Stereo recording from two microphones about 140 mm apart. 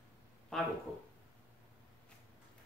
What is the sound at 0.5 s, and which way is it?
Speech, 5° left (ahead or behind).